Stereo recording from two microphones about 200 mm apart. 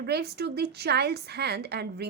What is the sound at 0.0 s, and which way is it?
A woman's voice, 55° right (ahead or behind).